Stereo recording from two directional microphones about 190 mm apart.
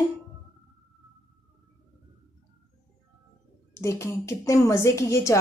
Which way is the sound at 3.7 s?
15° left (ahead or behind).